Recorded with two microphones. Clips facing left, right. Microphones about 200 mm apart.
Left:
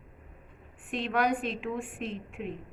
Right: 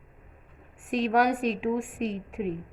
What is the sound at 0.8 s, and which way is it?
A woman's voice, 40° right (ahead or behind).